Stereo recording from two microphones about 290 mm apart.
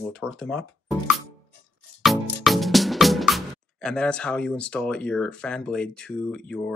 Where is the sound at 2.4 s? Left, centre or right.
Centre.